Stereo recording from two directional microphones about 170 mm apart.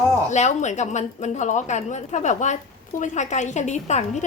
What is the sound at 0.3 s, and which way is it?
A woman's voice, 45° left (ahead or behind).